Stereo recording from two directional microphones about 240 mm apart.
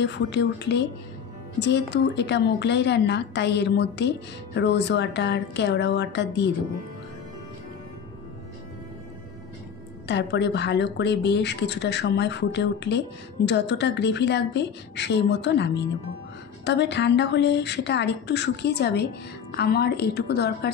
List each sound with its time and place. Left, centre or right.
0.0 s a woman's voice: left
10.0 s a woman's voice: left